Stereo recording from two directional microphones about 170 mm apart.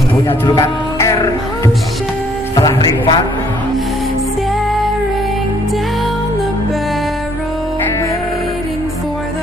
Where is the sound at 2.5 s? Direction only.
25° left (ahead or behind).